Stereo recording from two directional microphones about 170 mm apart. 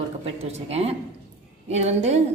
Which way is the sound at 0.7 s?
35° right (ahead or behind).